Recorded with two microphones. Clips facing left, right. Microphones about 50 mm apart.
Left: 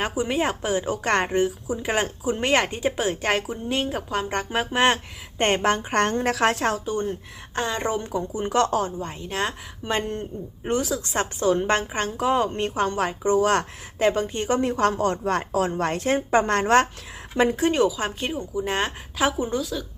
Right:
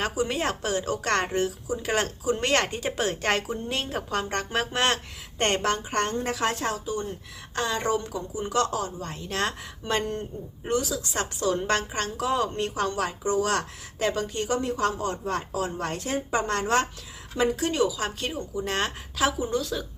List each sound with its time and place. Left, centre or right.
0.0 s a woman's voice: centre
5.6 s a woman's voice: left
7.8 s a woman's voice: left
9.2 s a woman's voice: centre
9.9 s a woman's voice: left